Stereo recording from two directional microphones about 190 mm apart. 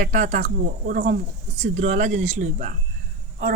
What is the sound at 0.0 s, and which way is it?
Speech, 40° right (ahead or behind).